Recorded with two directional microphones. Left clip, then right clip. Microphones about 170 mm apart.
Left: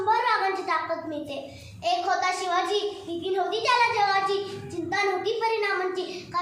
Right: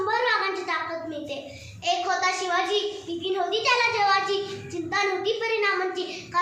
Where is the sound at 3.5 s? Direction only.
20° left (ahead or behind).